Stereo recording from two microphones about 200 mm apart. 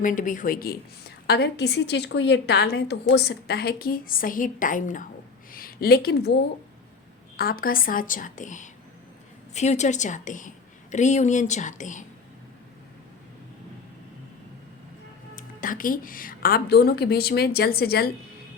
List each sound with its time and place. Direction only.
0.0 s a woman's voice: 40° left (ahead or behind)
7.3 s a woman's voice: 45° left (ahead or behind)
15.4 s a woman's voice: 45° left (ahead or behind)